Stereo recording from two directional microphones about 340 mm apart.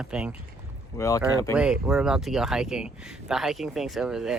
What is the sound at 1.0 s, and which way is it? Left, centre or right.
Speech, centre.